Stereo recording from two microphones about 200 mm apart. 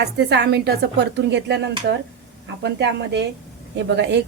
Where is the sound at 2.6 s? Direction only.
60° right (ahead or behind).